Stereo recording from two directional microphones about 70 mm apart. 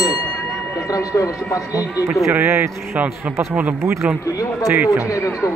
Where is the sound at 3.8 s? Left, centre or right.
Right.